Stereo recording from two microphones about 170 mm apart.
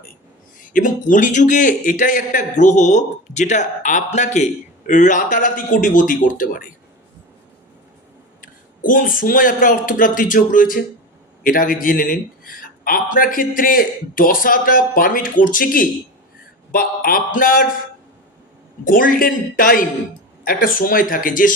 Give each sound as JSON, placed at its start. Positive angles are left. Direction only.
{"t": 0.6, "sound": "a man's voice", "side_deg": 50}
{"t": 8.4, "sound": "a man's voice", "side_deg": 55}
{"t": 18.9, "sound": "a man's voice", "side_deg": 55}